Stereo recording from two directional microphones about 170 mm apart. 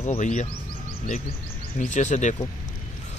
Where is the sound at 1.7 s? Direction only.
45° left (ahead or behind).